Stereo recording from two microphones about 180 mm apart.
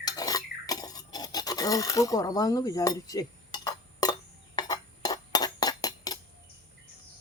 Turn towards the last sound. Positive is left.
turn(degrees=20)  # may be behind; listen again after turning